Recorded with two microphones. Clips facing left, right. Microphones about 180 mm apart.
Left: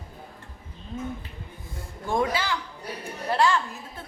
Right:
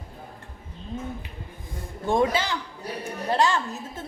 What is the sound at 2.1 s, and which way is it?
A woman's voice, 25° right (ahead or behind).